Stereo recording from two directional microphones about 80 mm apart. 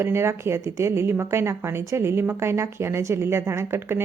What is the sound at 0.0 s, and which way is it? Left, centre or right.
A woman's voice, right.